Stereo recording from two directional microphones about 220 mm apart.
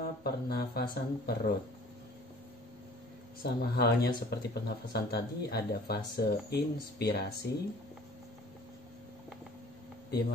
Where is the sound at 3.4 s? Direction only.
45° left (ahead or behind).